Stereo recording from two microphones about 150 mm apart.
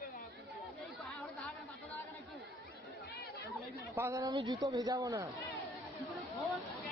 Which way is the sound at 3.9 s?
15° right (ahead or behind).